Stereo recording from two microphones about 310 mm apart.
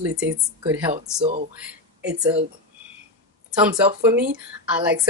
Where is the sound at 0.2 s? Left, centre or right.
Centre.